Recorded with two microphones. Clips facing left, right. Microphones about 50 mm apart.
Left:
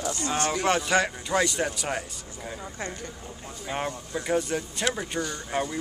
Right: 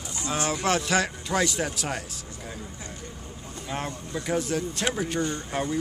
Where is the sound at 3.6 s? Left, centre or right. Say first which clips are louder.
Left 2 dB; centre.